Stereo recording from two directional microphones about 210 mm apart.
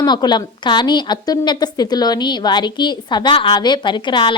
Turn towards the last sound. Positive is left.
turn(degrees=20)  # may be behind; listen again after turning